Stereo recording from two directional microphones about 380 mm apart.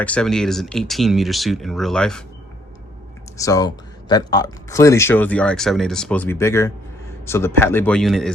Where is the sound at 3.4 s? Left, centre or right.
Centre.